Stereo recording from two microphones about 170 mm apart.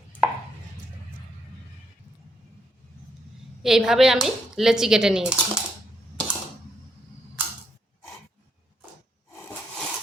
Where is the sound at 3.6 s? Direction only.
Centre (ahead or behind).